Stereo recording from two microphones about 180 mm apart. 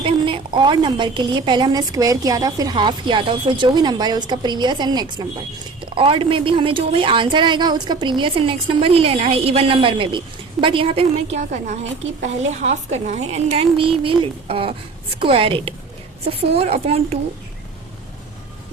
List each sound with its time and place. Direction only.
0.0 s a woman's voice: 30° right (ahead or behind)